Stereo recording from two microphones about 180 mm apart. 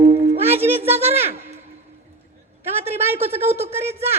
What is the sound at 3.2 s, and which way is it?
Speech, 35° right (ahead or behind).